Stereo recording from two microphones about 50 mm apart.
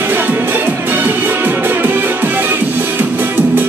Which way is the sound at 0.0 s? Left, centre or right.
Right.